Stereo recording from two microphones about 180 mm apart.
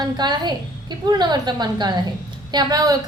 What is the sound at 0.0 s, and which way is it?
A woman's voice, 25° right (ahead or behind).